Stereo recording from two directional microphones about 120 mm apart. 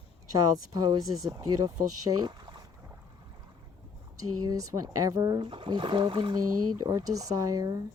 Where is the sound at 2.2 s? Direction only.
40° right (ahead or behind).